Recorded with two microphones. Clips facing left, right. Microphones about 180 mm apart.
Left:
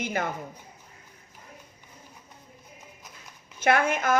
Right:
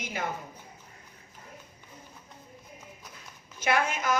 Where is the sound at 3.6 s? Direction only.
55° left (ahead or behind).